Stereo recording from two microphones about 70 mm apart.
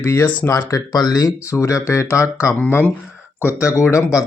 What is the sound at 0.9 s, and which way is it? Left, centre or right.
Speech, left.